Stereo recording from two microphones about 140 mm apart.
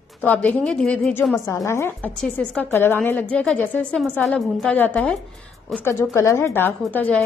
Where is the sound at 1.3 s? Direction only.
25° left (ahead or behind).